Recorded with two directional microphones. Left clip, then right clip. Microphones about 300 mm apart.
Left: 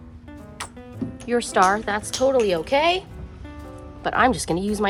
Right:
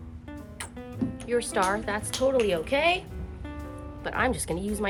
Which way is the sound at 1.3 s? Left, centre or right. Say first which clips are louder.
Left 7 dB; left.